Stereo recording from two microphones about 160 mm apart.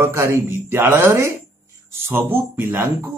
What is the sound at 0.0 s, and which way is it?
A man's voice, 15° right (ahead or behind).